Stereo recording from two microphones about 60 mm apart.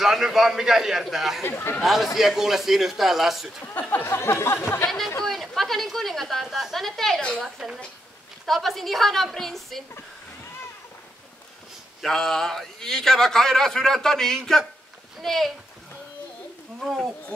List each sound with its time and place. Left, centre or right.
0.0 s a man's voice: centre
1.4 s speech: left
1.8 s a woman's voice: centre
3.9 s a sound: left
4.8 s a man's voice: centre
12.0 s a man's voice: centre
16.8 s a woman's voice: centre